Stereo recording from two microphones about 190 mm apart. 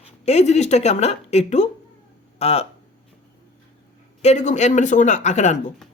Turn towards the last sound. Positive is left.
turn(degrees=35)  # may be behind; listen again after turning